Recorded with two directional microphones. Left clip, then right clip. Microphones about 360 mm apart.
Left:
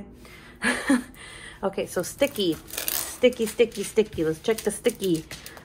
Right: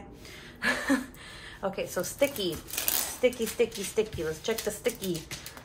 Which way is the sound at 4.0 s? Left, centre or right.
Left.